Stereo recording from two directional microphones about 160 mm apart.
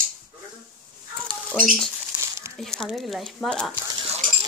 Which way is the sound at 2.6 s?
Centre (ahead or behind).